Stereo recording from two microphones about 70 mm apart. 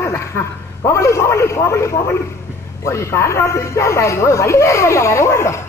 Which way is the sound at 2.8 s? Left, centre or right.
Left.